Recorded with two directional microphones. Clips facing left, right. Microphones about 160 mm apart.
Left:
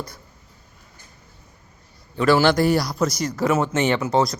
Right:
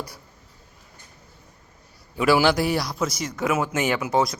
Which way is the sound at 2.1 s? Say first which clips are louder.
Left 2 dB; 5° right (ahead or behind).